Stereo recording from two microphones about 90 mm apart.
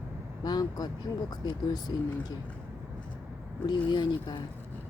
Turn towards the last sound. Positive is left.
turn(degrees=55)  # may be behind; listen again after turning